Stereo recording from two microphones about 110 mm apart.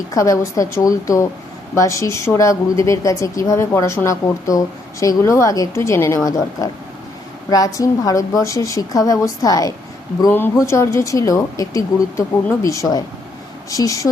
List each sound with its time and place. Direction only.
0.1 s a woman's voice: 30° left (ahead or behind)
10.2 s a woman's voice: 20° left (ahead or behind)